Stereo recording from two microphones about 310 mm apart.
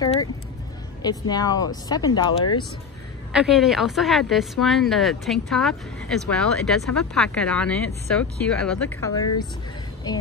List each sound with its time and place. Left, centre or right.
0.0 s speech: centre
3.3 s speech: centre